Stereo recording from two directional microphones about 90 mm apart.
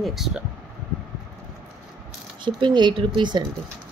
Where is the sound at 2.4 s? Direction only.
60° right (ahead or behind).